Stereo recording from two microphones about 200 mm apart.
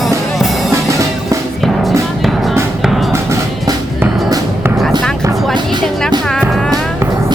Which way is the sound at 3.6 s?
20° right (ahead or behind).